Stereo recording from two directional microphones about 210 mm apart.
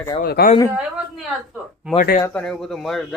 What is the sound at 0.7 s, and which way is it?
Speech, centre (ahead or behind).